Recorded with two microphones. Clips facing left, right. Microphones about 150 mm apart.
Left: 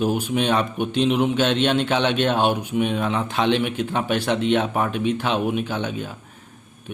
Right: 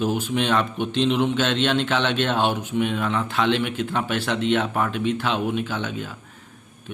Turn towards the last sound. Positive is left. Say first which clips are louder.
# left 2 dB
turn(degrees=20)  # may be behind; listen again after turning